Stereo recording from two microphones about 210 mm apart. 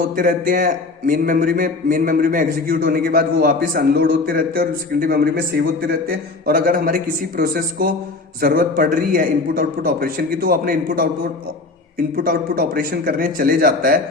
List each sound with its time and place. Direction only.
0.2 s a man's voice: 40° right (ahead or behind)
12.1 s a man's voice: 45° right (ahead or behind)